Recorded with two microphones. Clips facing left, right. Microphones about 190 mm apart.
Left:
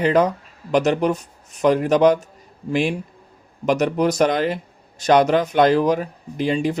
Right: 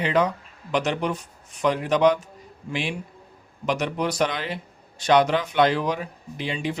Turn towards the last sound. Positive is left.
turn(degrees=45)  # may be behind; listen again after turning